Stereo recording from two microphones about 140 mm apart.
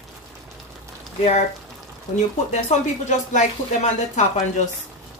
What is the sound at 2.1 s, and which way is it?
Speech, 55° left (ahead or behind).